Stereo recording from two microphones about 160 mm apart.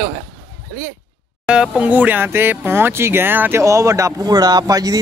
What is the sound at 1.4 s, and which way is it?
Speech, 5° right (ahead or behind).